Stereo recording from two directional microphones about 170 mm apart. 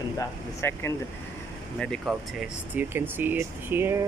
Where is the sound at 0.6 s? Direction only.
15° left (ahead or behind).